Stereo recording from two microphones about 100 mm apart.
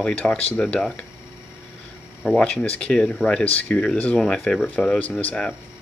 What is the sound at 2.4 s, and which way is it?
Speech, 15° left (ahead or behind).